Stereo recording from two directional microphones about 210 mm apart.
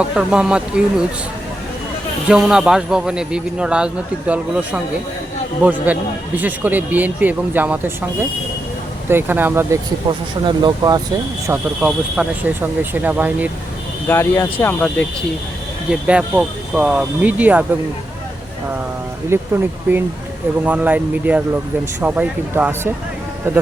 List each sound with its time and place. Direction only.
0.0 s speech: 5° right (ahead or behind)
2.2 s a man's voice: 5° right (ahead or behind)
9.0 s a man's voice: 10° right (ahead or behind)
10.1 s speech: 20° right (ahead or behind)
11.4 s a man's voice: 10° right (ahead or behind)
14.1 s speech: 10° left (ahead or behind)
15.9 s speech: 5° right (ahead or behind)
19.3 s a man's voice: 10° right (ahead or behind)